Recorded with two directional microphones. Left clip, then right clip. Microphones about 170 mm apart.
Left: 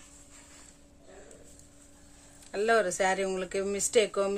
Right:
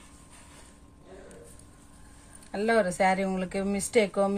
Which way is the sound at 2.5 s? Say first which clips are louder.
Right 1 dB; 30° left (ahead or behind).